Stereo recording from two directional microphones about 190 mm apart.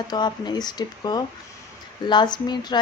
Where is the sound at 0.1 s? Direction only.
25° left (ahead or behind).